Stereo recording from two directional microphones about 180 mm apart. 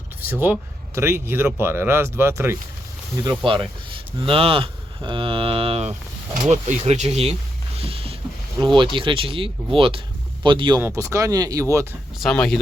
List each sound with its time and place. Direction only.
0.2 s speech: 10° right (ahead or behind)
3.2 s speech: 25° right (ahead or behind)
7.8 s a sound: 30° right (ahead or behind)
8.6 s speech: 25° right (ahead or behind)
10.8 s speech: 15° right (ahead or behind)
12.2 s speech: 5° left (ahead or behind)